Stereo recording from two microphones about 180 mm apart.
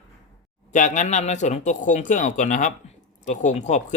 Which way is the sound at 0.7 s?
45° left (ahead or behind).